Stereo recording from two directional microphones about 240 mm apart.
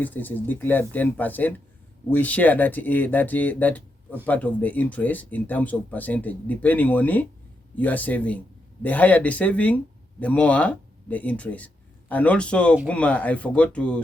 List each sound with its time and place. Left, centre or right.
0.0 s speech: centre